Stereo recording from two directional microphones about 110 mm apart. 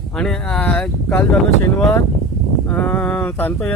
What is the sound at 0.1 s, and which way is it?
Speech, 5° left (ahead or behind).